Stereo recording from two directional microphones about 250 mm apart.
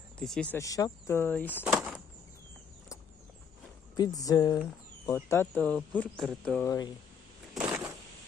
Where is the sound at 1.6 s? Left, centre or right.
Centre.